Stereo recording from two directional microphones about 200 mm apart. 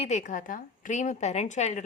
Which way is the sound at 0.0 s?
35° left (ahead or behind).